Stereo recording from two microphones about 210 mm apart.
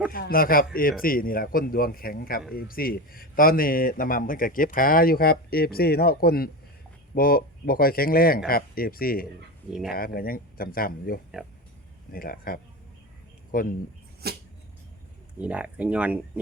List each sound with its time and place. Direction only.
0.1 s speech: 45° left (ahead or behind)
9.6 s speech: centre (ahead or behind)
9.9 s speech: 45° left (ahead or behind)
14.2 s a sound: 50° right (ahead or behind)
15.4 s speech: 5° right (ahead or behind)